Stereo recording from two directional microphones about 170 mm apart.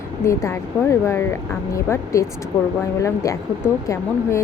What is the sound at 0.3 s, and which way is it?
Speech, 15° left (ahead or behind).